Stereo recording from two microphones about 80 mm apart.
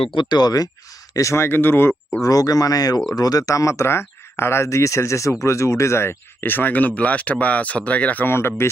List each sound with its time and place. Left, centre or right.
0.1 s speech: left
1.1 s speech: left
2.2 s speech: left